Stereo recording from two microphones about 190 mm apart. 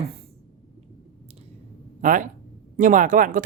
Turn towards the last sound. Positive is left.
turn(degrees=-45)  # may be behind; listen again after turning